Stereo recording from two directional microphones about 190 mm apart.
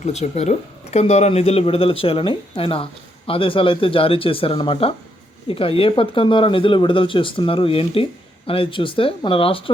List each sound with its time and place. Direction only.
0.0 s speech: 35° left (ahead or behind)